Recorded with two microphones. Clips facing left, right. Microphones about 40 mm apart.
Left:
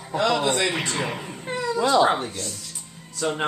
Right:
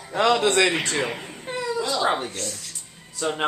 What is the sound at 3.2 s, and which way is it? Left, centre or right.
Speech, centre.